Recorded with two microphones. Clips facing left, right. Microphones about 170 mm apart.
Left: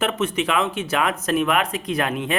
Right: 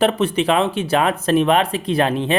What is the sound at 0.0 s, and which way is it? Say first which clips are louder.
Speech: right 5 dB; 30° right (ahead or behind).